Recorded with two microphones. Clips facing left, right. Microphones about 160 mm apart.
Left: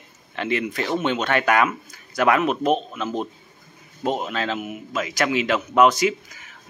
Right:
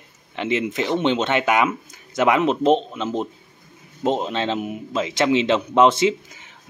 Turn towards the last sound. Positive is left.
turn(degrees=-25)  # may be behind; listen again after turning